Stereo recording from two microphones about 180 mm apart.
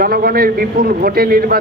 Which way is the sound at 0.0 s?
55° right (ahead or behind).